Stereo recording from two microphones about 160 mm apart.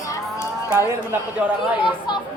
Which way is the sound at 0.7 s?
15° right (ahead or behind).